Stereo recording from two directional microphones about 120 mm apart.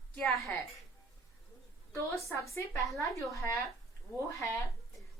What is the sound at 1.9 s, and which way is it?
A woman's voice, 25° left (ahead or behind).